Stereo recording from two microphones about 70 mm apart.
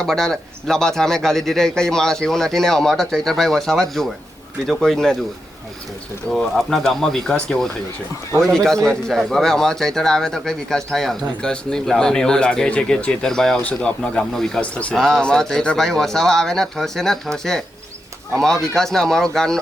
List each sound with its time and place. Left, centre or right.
0.0 s speech: centre
6.3 s speech: centre
13.6 s speech: centre
14.6 s speech: centre
14.9 s speech: centre